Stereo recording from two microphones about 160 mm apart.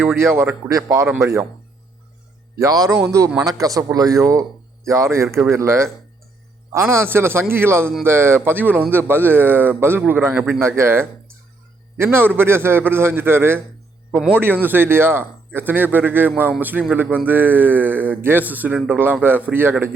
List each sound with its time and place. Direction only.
0.0 s a man's voice: 15° right (ahead or behind)
2.6 s a man's voice: 20° right (ahead or behind)